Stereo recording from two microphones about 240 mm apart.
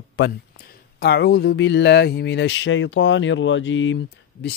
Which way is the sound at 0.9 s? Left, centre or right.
Left.